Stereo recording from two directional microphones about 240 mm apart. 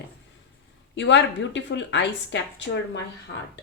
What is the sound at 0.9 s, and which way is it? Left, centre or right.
A woman's voice, left.